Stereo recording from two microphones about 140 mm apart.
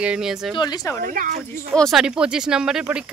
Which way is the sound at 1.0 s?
80° right.